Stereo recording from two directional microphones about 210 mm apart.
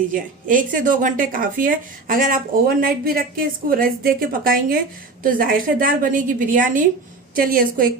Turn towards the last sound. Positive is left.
turn(degrees=-45)  # may be behind; listen again after turning